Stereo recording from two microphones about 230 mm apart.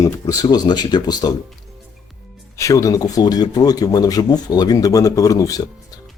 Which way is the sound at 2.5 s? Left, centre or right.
Centre.